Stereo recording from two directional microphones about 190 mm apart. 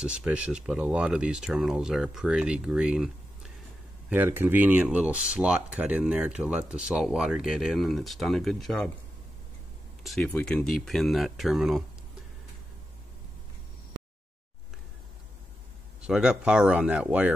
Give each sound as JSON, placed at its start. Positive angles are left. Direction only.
{"t": 0.0, "sound": "speech", "side_deg": -5}
{"t": 4.1, "sound": "speech", "side_deg": -10}
{"t": 10.0, "sound": "speech", "side_deg": 5}
{"t": 16.0, "sound": "speech", "side_deg": -5}